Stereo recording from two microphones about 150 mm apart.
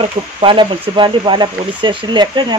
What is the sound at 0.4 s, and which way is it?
Speech, 35° right (ahead or behind).